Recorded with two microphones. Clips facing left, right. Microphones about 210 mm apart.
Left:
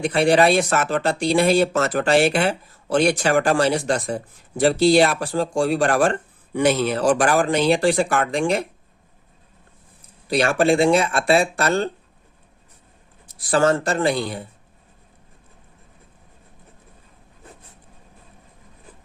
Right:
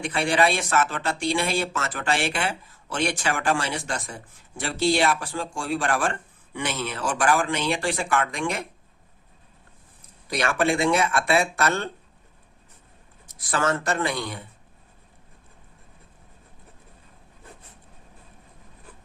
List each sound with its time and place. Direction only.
0.0 s speech: 40° left (ahead or behind)
10.2 s speech: 30° left (ahead or behind)
13.2 s speech: 30° left (ahead or behind)